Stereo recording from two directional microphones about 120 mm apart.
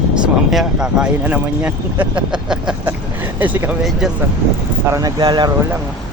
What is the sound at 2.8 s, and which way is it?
Speech, 15° right (ahead or behind).